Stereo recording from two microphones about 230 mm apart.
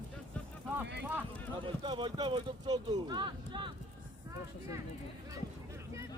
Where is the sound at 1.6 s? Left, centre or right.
Right.